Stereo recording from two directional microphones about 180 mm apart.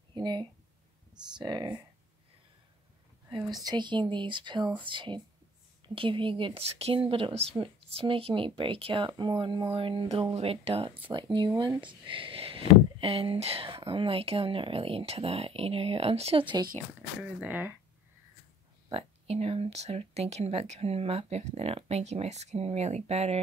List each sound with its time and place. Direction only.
0.1 s speech: 25° right (ahead or behind)
3.3 s speech: 25° right (ahead or behind)
17.2 s speech: 10° right (ahead or behind)
18.9 s speech: 30° right (ahead or behind)